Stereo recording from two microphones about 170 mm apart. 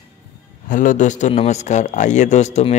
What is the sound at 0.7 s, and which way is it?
A man's voice, 50° left (ahead or behind).